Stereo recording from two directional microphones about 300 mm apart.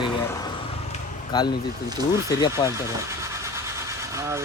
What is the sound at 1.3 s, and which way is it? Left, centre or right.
Speech, centre.